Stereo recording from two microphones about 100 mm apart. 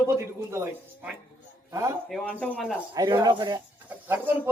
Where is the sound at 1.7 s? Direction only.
30° right (ahead or behind).